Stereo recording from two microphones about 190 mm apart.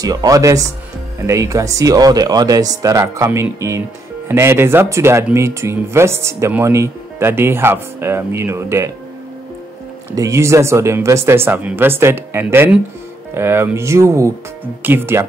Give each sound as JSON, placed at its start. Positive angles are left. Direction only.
{"t": 0.0, "sound": "speech", "side_deg": -20}
{"t": 10.1, "sound": "speech", "side_deg": -15}